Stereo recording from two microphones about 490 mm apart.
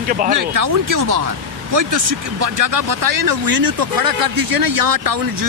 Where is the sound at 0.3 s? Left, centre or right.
Right.